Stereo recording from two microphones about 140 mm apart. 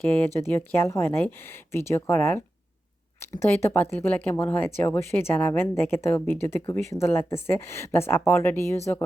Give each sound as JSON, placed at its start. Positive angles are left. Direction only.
{"t": 0.3, "sound": "speech", "side_deg": 15}